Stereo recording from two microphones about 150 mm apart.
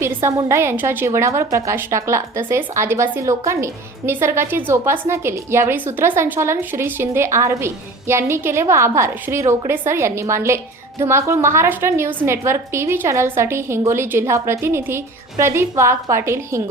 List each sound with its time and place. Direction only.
0.0 s a woman's voice: 20° right (ahead or behind)